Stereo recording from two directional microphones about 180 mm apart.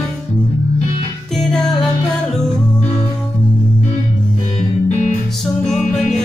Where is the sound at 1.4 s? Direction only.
Centre (ahead or behind).